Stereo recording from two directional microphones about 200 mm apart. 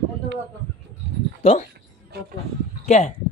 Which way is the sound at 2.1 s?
55° right (ahead or behind).